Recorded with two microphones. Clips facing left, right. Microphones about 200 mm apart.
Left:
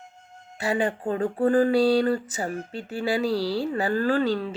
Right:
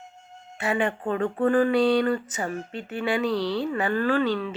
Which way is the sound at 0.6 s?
35° left (ahead or behind).